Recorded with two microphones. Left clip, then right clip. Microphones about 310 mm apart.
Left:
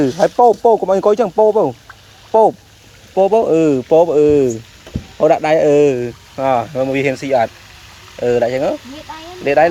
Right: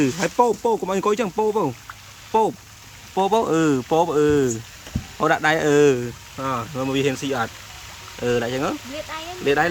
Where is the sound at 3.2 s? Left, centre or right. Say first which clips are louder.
Left 7 dB; centre.